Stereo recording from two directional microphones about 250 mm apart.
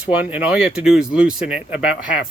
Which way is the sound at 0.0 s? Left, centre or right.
Centre.